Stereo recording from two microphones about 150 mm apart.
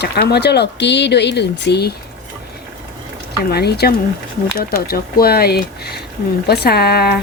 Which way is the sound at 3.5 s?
90° left.